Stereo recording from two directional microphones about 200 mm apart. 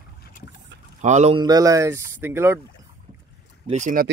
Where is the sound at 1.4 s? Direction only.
20° right (ahead or behind).